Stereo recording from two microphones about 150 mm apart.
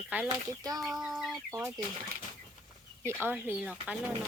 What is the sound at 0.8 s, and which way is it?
Speech, centre (ahead or behind).